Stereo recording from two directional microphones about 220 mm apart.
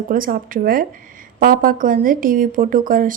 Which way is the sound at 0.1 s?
40° right (ahead or behind).